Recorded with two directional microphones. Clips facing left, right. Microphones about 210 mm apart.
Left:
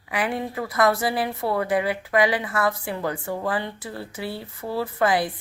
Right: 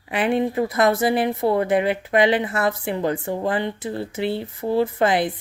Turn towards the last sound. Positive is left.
turn(degrees=-25)  # may be behind; listen again after turning